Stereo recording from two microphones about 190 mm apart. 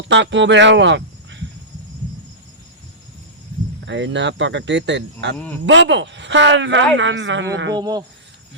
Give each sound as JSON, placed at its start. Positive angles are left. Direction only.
{"t": 0.1, "sound": "speech", "side_deg": -70}
{"t": 3.8, "sound": "speech", "side_deg": -70}
{"t": 7.8, "sound": "speech", "side_deg": -20}